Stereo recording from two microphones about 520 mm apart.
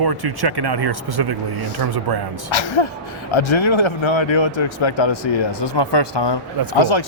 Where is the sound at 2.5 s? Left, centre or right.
Left.